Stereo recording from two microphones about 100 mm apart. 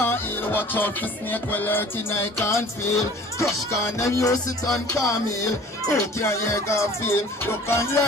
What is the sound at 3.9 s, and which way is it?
Music, 30° left (ahead or behind).